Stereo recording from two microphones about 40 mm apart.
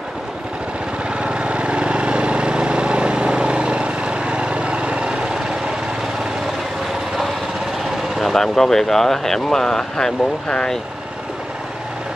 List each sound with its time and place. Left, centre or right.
1.1 s vehicle: right
8.2 s speech: centre